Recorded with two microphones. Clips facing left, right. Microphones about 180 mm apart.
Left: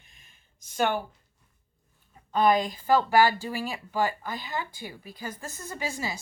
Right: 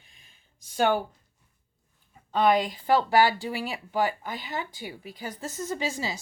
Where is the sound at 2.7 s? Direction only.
20° right (ahead or behind).